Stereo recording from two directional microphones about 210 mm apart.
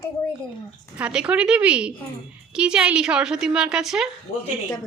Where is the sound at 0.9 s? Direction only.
5° right (ahead or behind).